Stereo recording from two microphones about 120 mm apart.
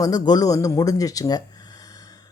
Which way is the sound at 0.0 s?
30° left (ahead or behind).